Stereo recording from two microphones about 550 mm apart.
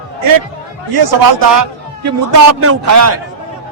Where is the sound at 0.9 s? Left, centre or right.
Right.